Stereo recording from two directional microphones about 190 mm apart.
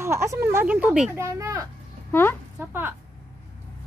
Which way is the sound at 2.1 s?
10° left (ahead or behind).